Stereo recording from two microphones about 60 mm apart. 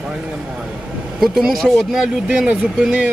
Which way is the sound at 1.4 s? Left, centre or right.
Centre.